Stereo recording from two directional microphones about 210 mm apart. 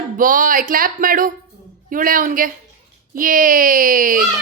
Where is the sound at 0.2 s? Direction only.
40° right (ahead or behind).